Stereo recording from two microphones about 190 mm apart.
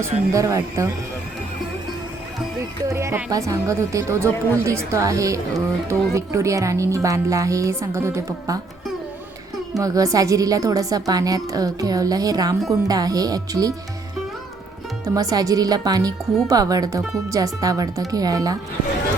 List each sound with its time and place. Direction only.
0.0 s a woman's voice: 15° right (ahead or behind)
2.8 s a woman's voice: 15° right (ahead or behind)
9.7 s a woman's voice: 15° right (ahead or behind)
15.0 s a woman's voice: 20° right (ahead or behind)